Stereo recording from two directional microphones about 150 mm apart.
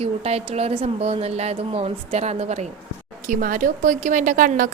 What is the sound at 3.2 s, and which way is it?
A woman's voice, 60° right (ahead or behind).